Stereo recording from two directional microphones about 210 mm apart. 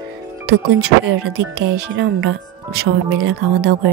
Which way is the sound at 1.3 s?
55° right (ahead or behind).